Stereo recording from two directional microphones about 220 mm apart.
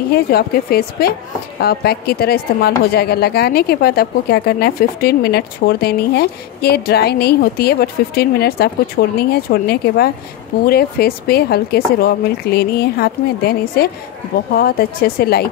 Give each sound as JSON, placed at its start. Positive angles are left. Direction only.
{"t": 0.1, "sound": "a woman's voice", "side_deg": 45}